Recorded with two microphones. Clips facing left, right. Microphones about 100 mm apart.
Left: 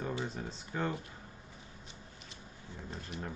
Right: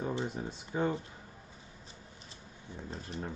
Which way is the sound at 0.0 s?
15° right (ahead or behind).